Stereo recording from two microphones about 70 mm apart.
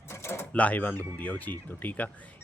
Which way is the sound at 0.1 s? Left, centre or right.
Left.